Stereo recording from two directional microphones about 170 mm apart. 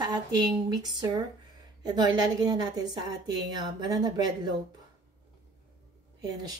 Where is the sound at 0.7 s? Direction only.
25° right (ahead or behind).